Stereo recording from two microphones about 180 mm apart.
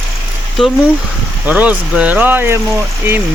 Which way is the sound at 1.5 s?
5° right (ahead or behind).